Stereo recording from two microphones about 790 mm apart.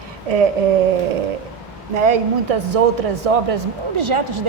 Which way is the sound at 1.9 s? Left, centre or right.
Right.